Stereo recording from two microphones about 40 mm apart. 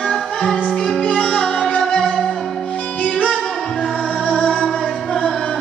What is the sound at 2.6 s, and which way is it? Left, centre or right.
Music, left.